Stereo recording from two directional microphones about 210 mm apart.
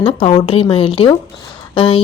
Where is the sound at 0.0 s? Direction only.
25° left (ahead or behind).